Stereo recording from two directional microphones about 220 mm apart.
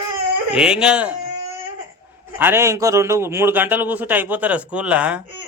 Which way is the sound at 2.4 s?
10° right (ahead or behind).